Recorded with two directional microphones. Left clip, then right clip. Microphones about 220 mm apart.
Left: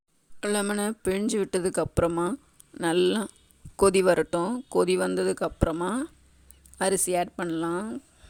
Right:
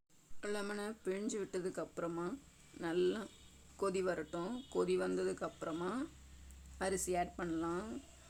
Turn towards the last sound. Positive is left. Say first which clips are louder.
# left 11 dB
turn(degrees=40)  # may be behind; listen again after turning